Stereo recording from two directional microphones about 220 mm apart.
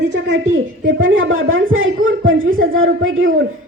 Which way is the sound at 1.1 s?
60° right (ahead or behind).